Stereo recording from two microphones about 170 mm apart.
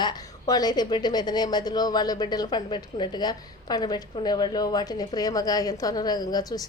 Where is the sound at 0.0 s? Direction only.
25° left (ahead or behind).